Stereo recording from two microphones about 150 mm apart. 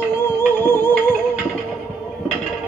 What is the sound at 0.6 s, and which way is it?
Music, 15° left (ahead or behind).